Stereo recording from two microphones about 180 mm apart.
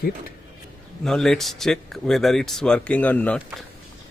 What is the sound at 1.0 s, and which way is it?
Speech, 5° left (ahead or behind).